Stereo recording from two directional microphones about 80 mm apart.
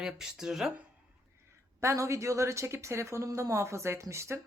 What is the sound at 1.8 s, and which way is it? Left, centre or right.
Speech, right.